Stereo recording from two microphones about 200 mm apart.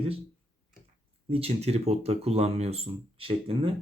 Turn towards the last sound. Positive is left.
turn(degrees=-25)  # may be behind; listen again after turning